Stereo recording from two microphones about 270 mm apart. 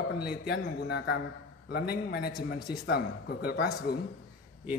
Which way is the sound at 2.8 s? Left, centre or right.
Left.